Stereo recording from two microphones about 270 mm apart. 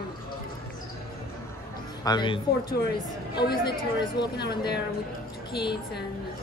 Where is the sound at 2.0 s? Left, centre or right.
Centre.